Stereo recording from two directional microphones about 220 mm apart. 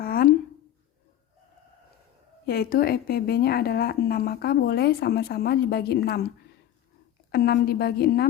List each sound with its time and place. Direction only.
0.0 s a sound: 45° left (ahead or behind)
2.5 s a woman's voice: 45° left (ahead or behind)
7.3 s a woman's voice: 45° left (ahead or behind)